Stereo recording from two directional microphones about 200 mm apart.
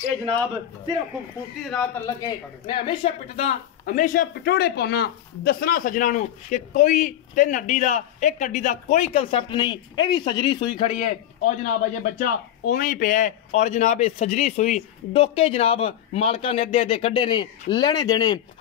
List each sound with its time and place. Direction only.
1.7 s a man's voice: 5° left (ahead or behind)
2.0 s speech: 25° left (ahead or behind)